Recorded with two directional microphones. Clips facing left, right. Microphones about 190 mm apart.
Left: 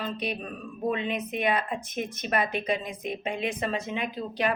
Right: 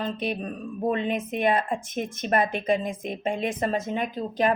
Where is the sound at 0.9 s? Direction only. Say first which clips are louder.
Right 3 dB; 45° right (ahead or behind).